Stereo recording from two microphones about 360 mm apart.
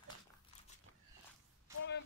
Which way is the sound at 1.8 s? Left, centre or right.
Left.